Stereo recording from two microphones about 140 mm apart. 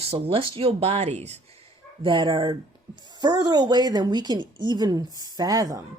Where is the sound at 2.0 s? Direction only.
35° right (ahead or behind).